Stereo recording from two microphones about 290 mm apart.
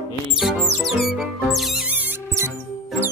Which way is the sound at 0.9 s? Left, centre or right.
Centre.